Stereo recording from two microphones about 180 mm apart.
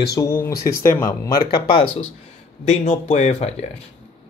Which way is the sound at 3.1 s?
40° left (ahead or behind).